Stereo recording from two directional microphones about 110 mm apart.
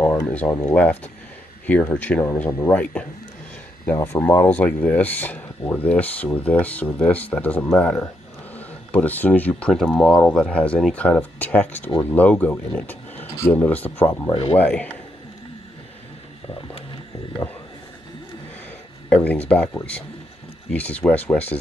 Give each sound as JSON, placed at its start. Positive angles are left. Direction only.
{"t": 0.0, "sound": "a sound", "side_deg": 25}
{"t": 0.5, "sound": "speech", "side_deg": 30}
{"t": 0.7, "sound": "speech", "side_deg": 15}
{"t": 3.9, "sound": "speech", "side_deg": 25}
{"t": 14.3, "sound": "speech", "side_deg": 60}
{"t": 14.6, "sound": "speech", "side_deg": 15}
{"t": 19.0, "sound": "speech", "side_deg": 15}
{"t": 20.7, "sound": "speech", "side_deg": 15}